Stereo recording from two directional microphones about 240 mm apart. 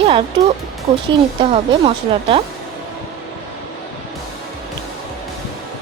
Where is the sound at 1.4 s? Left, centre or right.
Right.